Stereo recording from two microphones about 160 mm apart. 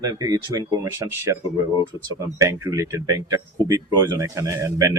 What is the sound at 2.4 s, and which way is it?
Speech, 20° right (ahead or behind).